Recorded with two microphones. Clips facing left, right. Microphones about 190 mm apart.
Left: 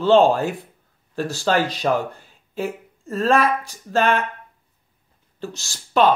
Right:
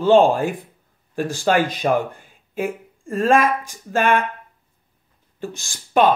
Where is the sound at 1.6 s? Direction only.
50° right (ahead or behind).